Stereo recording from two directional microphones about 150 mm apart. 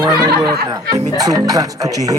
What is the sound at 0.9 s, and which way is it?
Speech, 25° right (ahead or behind).